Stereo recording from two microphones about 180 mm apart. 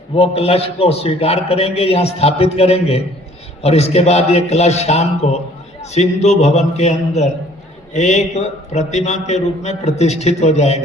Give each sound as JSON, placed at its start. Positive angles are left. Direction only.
{"t": 0.2, "sound": "a man's voice", "side_deg": 35}